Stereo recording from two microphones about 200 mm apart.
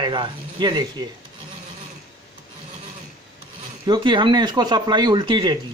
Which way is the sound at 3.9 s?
25° right (ahead or behind).